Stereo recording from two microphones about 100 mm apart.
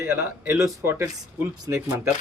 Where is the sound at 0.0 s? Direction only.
25° right (ahead or behind).